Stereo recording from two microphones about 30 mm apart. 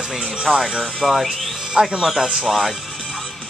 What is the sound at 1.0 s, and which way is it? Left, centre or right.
Speech, right.